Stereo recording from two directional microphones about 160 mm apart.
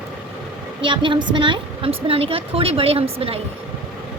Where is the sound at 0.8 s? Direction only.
30° right (ahead or behind).